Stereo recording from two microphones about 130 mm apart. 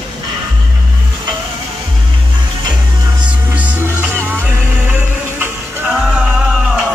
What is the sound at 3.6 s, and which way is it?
Music, 10° right (ahead or behind).